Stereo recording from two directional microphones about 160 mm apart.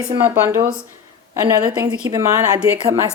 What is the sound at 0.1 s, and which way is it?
A woman's voice, 15° right (ahead or behind).